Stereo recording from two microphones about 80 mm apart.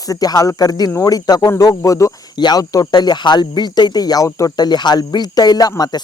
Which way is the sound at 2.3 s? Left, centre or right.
Left.